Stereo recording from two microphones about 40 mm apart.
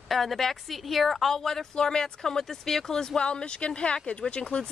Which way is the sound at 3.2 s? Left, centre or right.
Left.